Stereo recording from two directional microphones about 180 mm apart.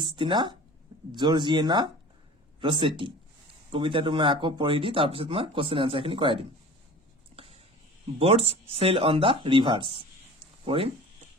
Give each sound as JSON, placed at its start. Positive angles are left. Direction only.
{"t": 0.0, "sound": "speech", "side_deg": -25}
{"t": 7.3, "sound": "a sound", "side_deg": -30}
{"t": 8.2, "sound": "speech", "side_deg": -35}